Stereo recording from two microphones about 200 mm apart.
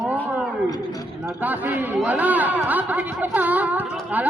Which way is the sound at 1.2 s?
10° right (ahead or behind).